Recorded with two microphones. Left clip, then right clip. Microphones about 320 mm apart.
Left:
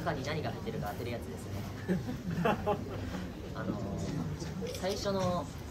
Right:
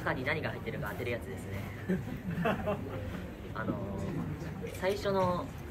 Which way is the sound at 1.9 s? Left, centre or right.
Left.